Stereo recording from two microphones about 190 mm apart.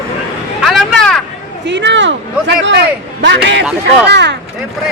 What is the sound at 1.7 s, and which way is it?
A man's voice, 70° right (ahead or behind).